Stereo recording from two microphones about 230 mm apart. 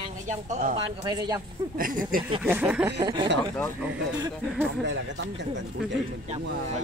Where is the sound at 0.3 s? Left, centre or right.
Right.